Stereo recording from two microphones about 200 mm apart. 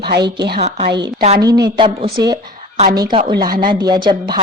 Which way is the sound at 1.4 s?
20° right (ahead or behind).